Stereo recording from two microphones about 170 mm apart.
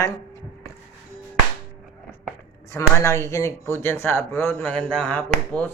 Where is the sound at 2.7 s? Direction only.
15° left (ahead or behind).